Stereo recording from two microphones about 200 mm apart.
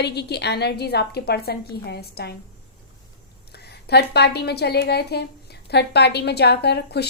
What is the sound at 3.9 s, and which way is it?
Speech, 55° left (ahead or behind).